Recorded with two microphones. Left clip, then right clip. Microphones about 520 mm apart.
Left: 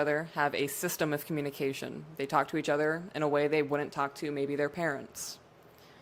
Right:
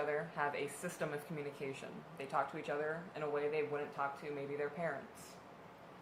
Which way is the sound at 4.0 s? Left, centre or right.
Left.